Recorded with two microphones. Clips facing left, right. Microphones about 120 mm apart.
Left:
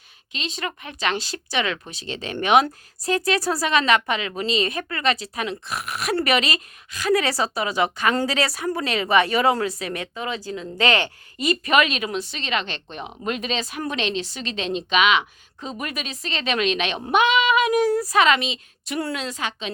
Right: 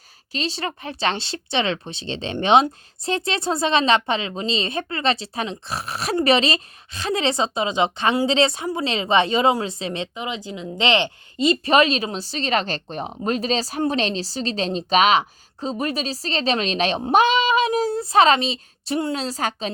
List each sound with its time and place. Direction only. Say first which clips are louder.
0.3 s speech: right 3 dB; 35° right (ahead or behind)